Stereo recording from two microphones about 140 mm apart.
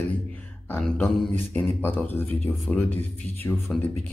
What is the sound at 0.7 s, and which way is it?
Speech, 10° left (ahead or behind).